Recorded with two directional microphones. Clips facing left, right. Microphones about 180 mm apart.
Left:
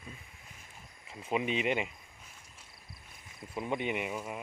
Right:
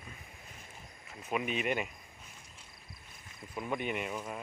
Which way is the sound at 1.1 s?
25° left (ahead or behind).